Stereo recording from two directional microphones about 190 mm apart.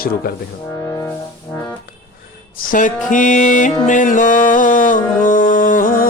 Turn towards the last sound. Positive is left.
turn(degrees=45)  # may be behind; listen again after turning